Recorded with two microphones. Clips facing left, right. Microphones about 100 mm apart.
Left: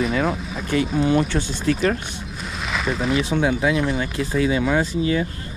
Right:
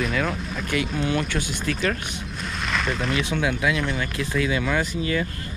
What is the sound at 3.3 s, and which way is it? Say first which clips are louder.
Speech: left 4 dB; 35° left (ahead or behind).